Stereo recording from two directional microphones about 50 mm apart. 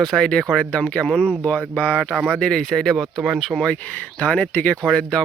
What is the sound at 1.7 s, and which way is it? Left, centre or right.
Speech, left.